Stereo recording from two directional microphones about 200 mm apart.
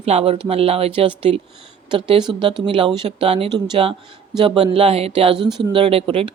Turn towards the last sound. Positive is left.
turn(degrees=-25)  # may be behind; listen again after turning